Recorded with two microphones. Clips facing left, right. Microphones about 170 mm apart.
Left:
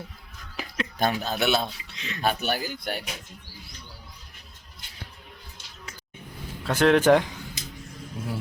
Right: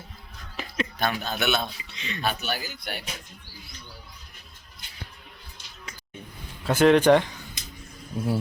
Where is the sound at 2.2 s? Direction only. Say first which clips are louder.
Left 4 dB; 50° left (ahead or behind).